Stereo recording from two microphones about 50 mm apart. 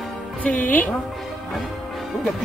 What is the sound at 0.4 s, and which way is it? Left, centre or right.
Speech, left.